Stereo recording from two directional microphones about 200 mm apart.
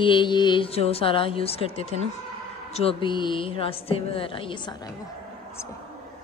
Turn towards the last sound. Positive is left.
turn(degrees=20)  # may be behind; listen again after turning